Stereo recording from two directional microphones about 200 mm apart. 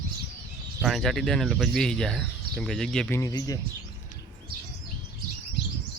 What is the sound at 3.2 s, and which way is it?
Speech, 20° left (ahead or behind).